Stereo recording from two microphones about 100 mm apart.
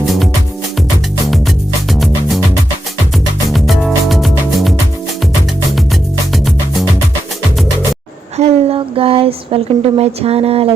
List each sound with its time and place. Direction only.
1.9 s music: centre (ahead or behind)
3.5 s music: centre (ahead or behind)
8.4 s a sound: 70° right (ahead or behind)